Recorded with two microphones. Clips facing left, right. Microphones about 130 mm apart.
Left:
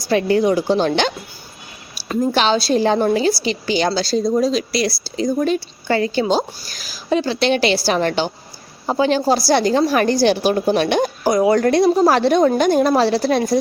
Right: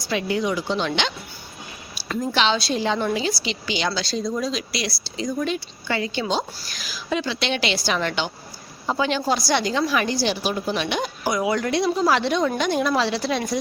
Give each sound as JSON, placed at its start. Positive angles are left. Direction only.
{"t": 0.1, "sound": "a woman's voice", "side_deg": 45}
{"t": 2.3, "sound": "a woman's voice", "side_deg": 40}